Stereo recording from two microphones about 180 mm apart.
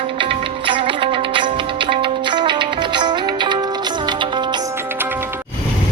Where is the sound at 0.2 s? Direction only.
30° right (ahead or behind).